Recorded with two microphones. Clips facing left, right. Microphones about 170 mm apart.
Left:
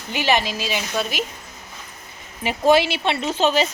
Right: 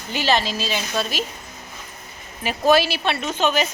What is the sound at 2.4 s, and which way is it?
Speech, 20° left (ahead or behind).